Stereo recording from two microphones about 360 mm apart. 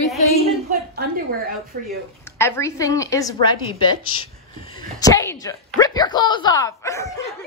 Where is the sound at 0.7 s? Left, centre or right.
Right.